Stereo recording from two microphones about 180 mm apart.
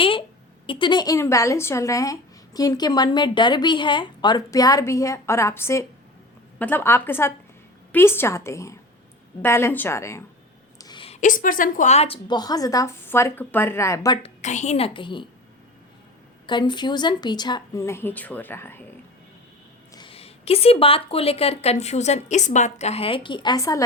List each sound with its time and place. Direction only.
0.0 s a sound: 30° left (ahead or behind)
0.7 s a woman's voice: 25° left (ahead or behind)
14.2 s speech: 35° left (ahead or behind)
16.5 s speech: 25° left (ahead or behind)
19.9 s speech: 25° left (ahead or behind)